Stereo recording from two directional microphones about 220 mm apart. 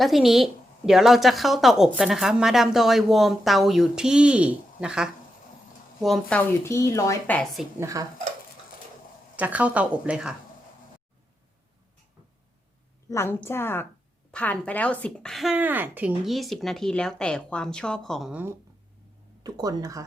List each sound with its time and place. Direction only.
0.0 s a woman's voice: centre (ahead or behind)
7.8 s speech: 15° right (ahead or behind)
9.3 s speech: 5° right (ahead or behind)
13.1 s a woman's voice: 10° left (ahead or behind); by 18.5 s 5° right (ahead or behind)
19.4 s speech: 15° right (ahead or behind)